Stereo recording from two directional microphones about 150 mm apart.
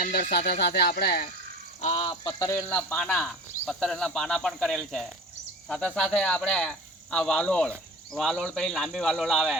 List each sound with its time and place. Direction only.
0.0 s speech: 80° left
1.8 s speech: 40° left (ahead or behind)
2.5 s speech: 15° left (ahead or behind)